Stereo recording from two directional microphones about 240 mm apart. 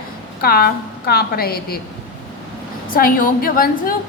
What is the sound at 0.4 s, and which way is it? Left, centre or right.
A woman's voice, left.